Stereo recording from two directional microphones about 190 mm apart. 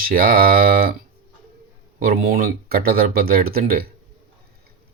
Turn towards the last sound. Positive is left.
turn(degrees=-50)  # may be behind; listen again after turning